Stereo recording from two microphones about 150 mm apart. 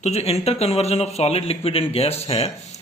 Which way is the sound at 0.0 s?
45° left (ahead or behind).